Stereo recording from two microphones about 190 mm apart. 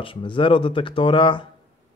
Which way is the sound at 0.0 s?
25° left (ahead or behind).